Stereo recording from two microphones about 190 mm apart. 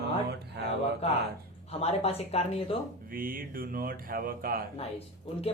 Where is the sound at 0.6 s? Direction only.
60° right (ahead or behind).